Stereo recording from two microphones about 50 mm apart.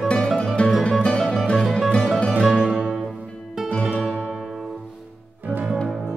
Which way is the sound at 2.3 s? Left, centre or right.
Centre.